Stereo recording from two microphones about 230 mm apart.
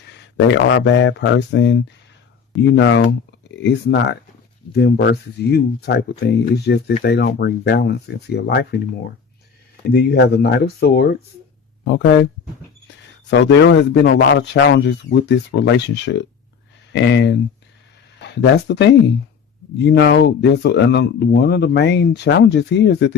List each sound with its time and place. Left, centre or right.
0.1 s speech: left
9.9 s speech: left
13.3 s speech: left